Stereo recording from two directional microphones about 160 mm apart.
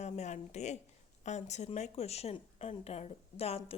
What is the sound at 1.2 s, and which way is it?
Speech, 45° left (ahead or behind).